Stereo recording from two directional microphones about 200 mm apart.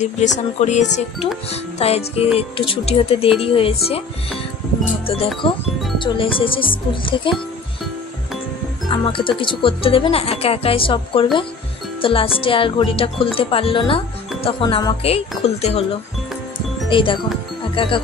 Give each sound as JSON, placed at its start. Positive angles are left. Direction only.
{"t": 0.0, "sound": "music", "side_deg": 35}
{"t": 2.3, "sound": "a woman's voice", "side_deg": 25}
{"t": 5.0, "sound": "a woman's voice", "side_deg": 30}
{"t": 8.8, "sound": "a woman's voice", "side_deg": 25}
{"t": 16.9, "sound": "a woman's voice", "side_deg": 25}